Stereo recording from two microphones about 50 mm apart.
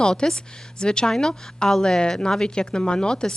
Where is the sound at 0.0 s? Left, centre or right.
Centre.